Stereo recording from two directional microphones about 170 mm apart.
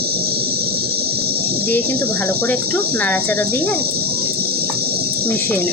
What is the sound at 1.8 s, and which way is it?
Speech, 65° right (ahead or behind).